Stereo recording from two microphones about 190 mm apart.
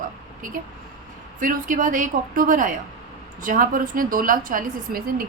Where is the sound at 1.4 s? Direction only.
45° right (ahead or behind).